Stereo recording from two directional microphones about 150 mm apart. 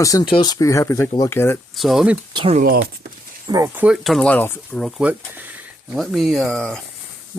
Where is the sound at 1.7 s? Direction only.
Centre (ahead or behind).